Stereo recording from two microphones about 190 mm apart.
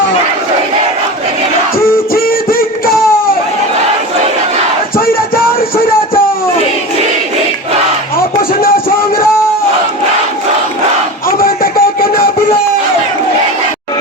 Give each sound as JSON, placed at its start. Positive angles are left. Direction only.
{"t": 2.1, "sound": "music", "side_deg": 50}
{"t": 4.9, "sound": "music", "side_deg": 50}
{"t": 8.4, "sound": "music", "side_deg": 50}
{"t": 11.3, "sound": "a sound", "side_deg": 50}